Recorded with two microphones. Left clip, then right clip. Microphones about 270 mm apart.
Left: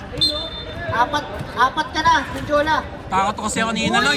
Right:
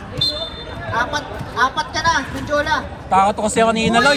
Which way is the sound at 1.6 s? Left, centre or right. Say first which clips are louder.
Even; right.